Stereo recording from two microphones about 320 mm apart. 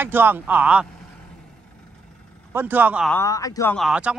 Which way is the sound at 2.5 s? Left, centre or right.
Centre.